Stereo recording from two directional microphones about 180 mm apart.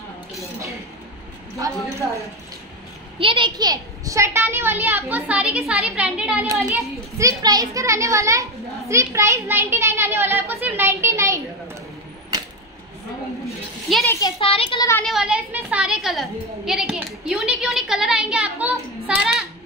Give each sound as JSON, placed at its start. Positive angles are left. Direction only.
{"t": 1.6, "sound": "a child's voice", "side_deg": -15}
{"t": 3.2, "sound": "a child's voice", "side_deg": -30}
{"t": 7.2, "sound": "a child's voice", "side_deg": -20}
{"t": 12.3, "sound": "a sound", "side_deg": -20}
{"t": 13.9, "sound": "a woman's voice", "side_deg": 0}
{"t": 14.4, "sound": "a child's voice", "side_deg": 30}
{"t": 15.0, "sound": "a woman's voice", "side_deg": -5}
{"t": 18.7, "sound": "child singing", "side_deg": -5}